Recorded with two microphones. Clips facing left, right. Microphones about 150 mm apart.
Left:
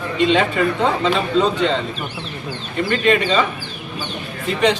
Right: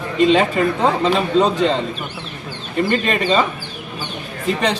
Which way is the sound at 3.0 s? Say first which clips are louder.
Left 2 dB; 35° right (ahead or behind).